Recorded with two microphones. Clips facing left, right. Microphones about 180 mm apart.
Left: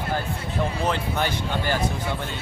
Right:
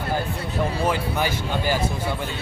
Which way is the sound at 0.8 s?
10° right (ahead or behind).